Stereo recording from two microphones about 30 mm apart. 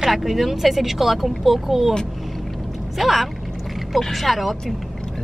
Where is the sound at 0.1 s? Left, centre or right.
Centre.